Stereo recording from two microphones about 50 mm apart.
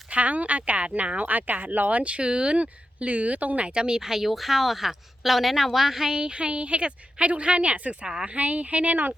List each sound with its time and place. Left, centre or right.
0.1 s speech: right
8.4 s speech: right